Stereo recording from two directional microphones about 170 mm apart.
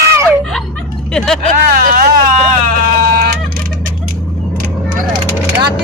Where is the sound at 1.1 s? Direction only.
5° left (ahead or behind).